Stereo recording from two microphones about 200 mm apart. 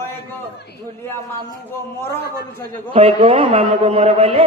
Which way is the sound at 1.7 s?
10° left (ahead or behind).